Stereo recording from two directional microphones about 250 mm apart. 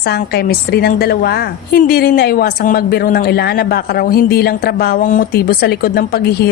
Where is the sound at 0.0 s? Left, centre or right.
Left.